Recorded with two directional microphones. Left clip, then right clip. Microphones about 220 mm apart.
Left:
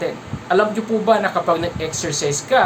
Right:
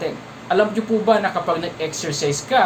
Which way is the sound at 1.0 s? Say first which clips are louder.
Left 2 dB; 10° left (ahead or behind).